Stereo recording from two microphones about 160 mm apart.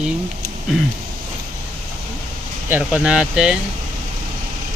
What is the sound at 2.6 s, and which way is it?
Speech, 10° right (ahead or behind).